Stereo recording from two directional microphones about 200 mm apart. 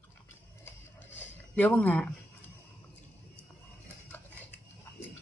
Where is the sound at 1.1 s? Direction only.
10° left (ahead or behind).